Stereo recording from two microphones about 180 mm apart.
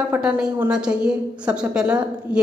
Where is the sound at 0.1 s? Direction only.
10° right (ahead or behind).